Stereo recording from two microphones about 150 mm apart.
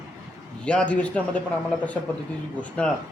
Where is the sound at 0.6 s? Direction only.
10° left (ahead or behind).